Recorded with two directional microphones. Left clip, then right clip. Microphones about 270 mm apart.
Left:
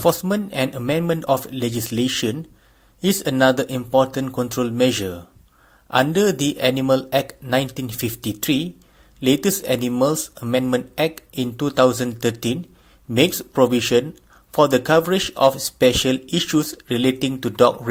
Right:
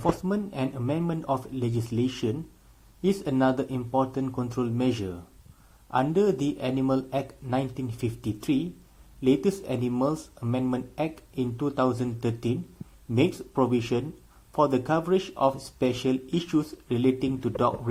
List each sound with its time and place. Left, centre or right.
0.3 s speech: left
10.0 s speech: left
10.9 s speech: left